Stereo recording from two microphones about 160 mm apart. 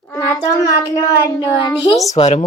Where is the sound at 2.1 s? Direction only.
45° left (ahead or behind).